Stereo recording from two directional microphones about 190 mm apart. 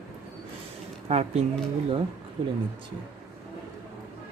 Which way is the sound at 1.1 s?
30° right (ahead or behind).